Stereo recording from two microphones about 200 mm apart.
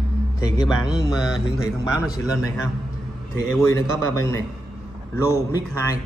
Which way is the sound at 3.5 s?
15° left (ahead or behind).